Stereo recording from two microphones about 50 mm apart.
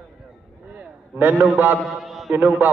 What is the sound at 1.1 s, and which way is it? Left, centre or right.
Speech, right.